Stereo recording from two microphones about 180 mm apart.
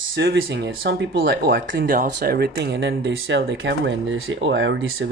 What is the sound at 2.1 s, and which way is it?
Speech, 65° right (ahead or behind).